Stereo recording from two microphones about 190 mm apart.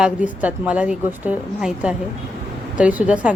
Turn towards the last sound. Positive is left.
turn(degrees=-5)  # may be behind; listen again after turning